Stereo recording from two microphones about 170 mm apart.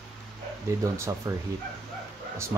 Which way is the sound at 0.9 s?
15° right (ahead or behind).